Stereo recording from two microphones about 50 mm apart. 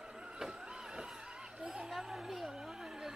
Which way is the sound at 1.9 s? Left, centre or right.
Centre.